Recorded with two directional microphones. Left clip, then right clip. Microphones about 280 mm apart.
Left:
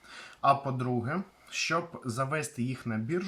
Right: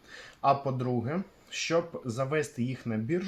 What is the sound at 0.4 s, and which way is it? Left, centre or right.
Speech, centre.